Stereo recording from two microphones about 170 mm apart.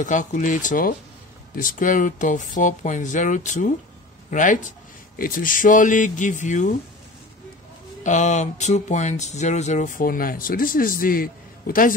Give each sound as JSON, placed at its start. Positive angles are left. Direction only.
{"t": 0.0, "sound": "speech", "side_deg": 50}
{"t": 8.0, "sound": "speech", "side_deg": 45}